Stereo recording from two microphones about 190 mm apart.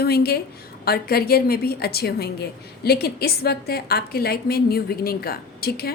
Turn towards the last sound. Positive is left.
turn(degrees=55)  # may be behind; listen again after turning